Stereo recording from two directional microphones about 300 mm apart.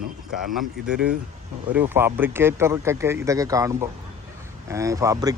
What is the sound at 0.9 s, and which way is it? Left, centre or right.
Speech, right.